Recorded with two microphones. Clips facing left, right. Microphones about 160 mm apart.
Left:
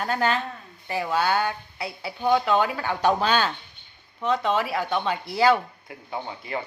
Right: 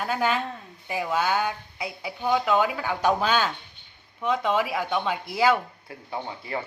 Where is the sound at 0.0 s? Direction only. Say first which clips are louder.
Left 1 dB; 10° right (ahead or behind).